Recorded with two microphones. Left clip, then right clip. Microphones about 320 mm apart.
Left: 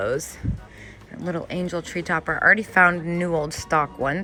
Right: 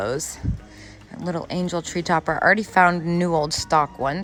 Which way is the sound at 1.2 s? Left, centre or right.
Centre.